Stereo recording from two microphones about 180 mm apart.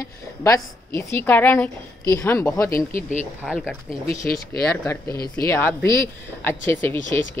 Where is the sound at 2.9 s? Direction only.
45° left (ahead or behind).